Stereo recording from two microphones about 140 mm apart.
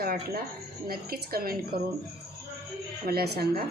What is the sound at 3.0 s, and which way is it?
Speech, 90° right.